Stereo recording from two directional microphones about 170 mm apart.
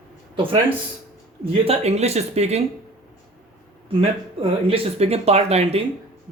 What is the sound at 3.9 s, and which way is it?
Speech, 35° right (ahead or behind).